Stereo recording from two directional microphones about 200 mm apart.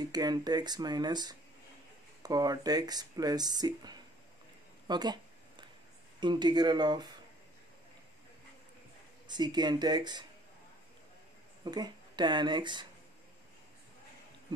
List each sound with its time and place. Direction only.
0.0 s speech: 20° right (ahead or behind)
4.8 s a sound: 20° right (ahead or behind)
6.2 s speech: 20° right (ahead or behind)
9.3 s speech: 20° right (ahead or behind)
11.6 s speech: 20° right (ahead or behind)